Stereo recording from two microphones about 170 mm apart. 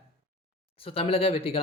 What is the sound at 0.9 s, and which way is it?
Speech, 35° left (ahead or behind).